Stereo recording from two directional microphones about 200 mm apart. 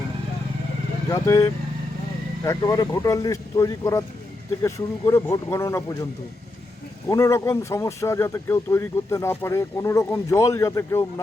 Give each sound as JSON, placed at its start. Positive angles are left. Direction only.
{"t": 1.1, "sound": "speech", "side_deg": 15}
{"t": 7.1, "sound": "speech", "side_deg": 15}